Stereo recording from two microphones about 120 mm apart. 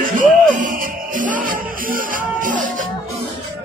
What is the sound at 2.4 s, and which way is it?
Music, 90° right.